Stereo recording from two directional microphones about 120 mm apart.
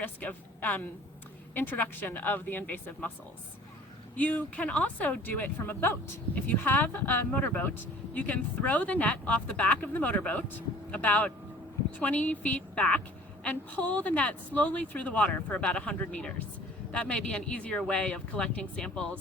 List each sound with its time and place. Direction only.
0.0 s a sound: 15° left (ahead or behind)
1.5 s speech: 15° left (ahead or behind)
4.2 s speech: 10° left (ahead or behind)